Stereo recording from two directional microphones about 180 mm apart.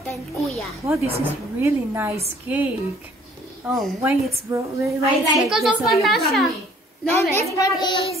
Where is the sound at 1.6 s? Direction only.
15° right (ahead or behind).